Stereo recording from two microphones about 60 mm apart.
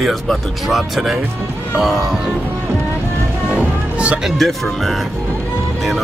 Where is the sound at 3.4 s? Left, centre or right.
Right.